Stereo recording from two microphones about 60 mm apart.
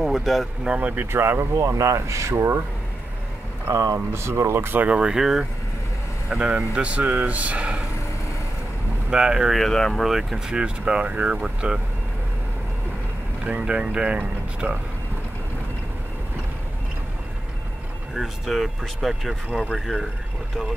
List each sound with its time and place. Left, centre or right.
0.0 s speech: centre
0.7 s speech: right
1.1 s speech: right
1.5 s speech: right
3.7 s speech: right
4.1 s speech: right
4.8 s speech: centre
9.1 s speech: centre
9.6 s speech: centre
10.0 s speech: centre
10.5 s speech: centre
13.4 s speech: right
18.1 s speech: centre